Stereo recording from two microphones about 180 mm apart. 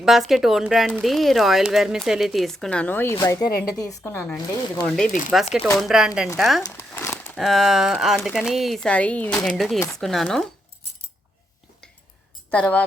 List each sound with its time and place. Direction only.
0.0 s speech: centre (ahead or behind); by 4.4 s 15° left (ahead or behind)
5.3 s speech: centre (ahead or behind)
12.5 s speech: 5° left (ahead or behind)